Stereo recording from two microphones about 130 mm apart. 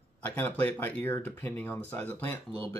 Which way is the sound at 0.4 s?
15° left (ahead or behind).